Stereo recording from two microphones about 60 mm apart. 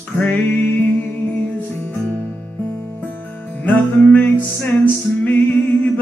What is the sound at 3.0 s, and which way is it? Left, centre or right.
Music, left.